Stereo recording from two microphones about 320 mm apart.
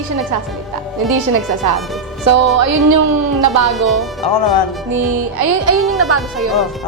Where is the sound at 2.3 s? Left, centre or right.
Right.